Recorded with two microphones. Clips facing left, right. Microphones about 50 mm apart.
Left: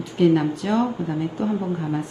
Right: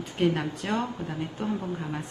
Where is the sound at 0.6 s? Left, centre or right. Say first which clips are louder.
Left 7 dB; right.